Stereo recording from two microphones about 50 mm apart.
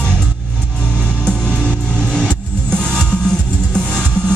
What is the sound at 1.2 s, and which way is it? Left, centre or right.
Music, centre.